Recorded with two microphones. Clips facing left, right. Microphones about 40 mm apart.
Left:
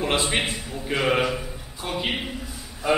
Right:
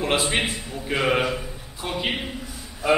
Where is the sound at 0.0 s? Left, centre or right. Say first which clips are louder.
Right 1 dB; centre.